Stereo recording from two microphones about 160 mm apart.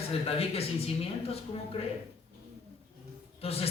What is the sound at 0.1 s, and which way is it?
Speech, 35° left (ahead or behind).